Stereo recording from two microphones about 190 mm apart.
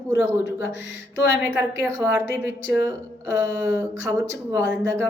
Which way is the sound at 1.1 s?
65° left (ahead or behind).